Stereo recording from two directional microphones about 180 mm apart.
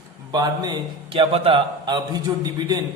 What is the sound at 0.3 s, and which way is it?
A man's voice, 25° right (ahead or behind).